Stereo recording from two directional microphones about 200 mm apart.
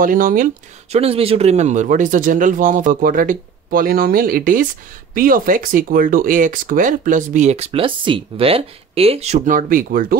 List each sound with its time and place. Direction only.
0.0 s speech: 45° right (ahead or behind)
0.9 s speech: 30° right (ahead or behind); by 10.1 s 45° right (ahead or behind)